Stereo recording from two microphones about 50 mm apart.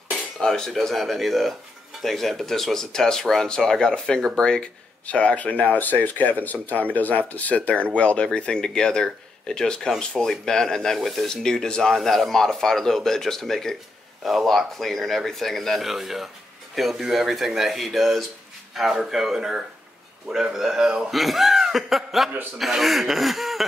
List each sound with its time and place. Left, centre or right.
0.4 s speech: centre
11.0 s speech: centre
11.2 s speech: centre
21.1 s speech: centre